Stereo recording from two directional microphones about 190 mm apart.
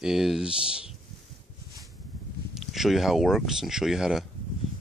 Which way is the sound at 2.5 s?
Centre (ahead or behind).